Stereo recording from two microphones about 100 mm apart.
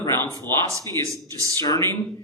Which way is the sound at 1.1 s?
35° right (ahead or behind).